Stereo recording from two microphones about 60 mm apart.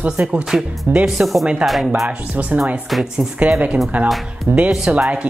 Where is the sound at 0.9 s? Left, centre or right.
Right.